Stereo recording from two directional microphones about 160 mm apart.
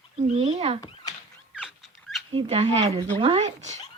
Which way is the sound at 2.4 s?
40° right (ahead or behind).